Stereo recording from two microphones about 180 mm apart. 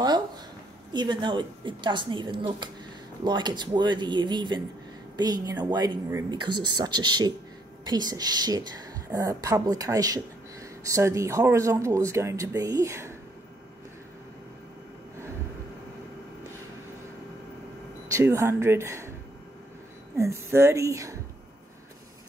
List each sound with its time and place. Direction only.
0.9 s speech: 25° right (ahead or behind)
18.0 s speech: 15° right (ahead or behind)
20.2 s speech: 15° right (ahead or behind)